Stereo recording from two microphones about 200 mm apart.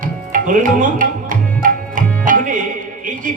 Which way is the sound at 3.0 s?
40° right (ahead or behind).